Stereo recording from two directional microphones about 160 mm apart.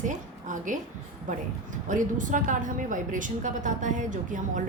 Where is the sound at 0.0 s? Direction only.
50° right (ahead or behind).